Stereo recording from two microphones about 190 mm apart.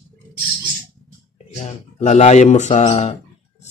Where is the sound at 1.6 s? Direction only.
35° left (ahead or behind).